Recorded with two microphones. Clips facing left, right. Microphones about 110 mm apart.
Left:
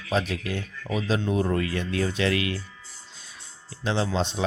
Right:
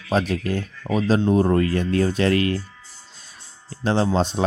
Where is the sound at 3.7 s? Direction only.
45° right (ahead or behind).